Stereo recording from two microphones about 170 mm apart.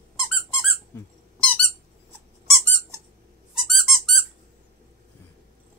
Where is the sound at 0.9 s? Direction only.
15° left (ahead or behind).